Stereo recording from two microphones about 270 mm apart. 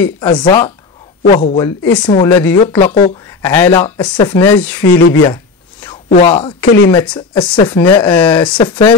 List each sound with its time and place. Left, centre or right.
0.0 s speech: centre
2.8 s speech: left
3.3 s speech: centre
4.8 s speech: left
5.2 s a sound: centre
6.0 s speech: left